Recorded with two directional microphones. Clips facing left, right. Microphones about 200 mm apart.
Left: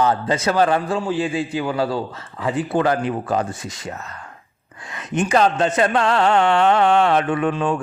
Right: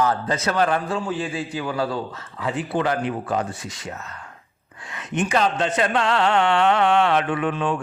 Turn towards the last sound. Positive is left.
turn(degrees=40)  # may be behind; listen again after turning